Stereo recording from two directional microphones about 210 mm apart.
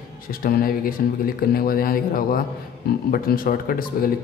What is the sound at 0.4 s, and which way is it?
A man's voice, 45° left (ahead or behind).